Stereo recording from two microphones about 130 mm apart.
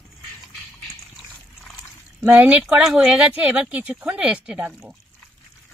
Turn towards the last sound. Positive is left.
turn(degrees=-10)  # may be behind; listen again after turning